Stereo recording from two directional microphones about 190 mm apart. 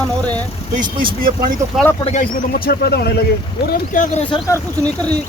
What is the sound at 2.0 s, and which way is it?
A man's voice, 40° left (ahead or behind).